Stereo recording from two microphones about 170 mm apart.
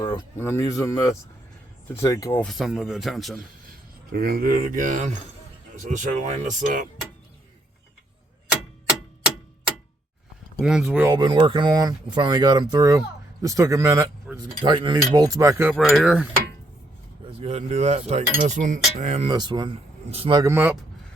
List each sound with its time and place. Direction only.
0.3 s a man's voice: 15° left (ahead or behind)
2.4 s speech: centre (ahead or behind)
3.7 s speech: 65° right (ahead or behind); by 5.1 s 45° right (ahead or behind)
5.9 s cutlery: 45° right (ahead or behind)
8.9 s clock: 5° right (ahead or behind)
10.6 s speech: 5° right (ahead or behind)
11.1 s speech: 25° right (ahead or behind)
14.6 s speech: 30° right (ahead or behind)
15.7 s speech: centre (ahead or behind)
17.2 s speech: 35° right (ahead or behind)
18.3 s cutlery: 45° right (ahead or behind)
19.3 s speech: 25° right (ahead or behind)
20.4 s speech: 10° right (ahead or behind)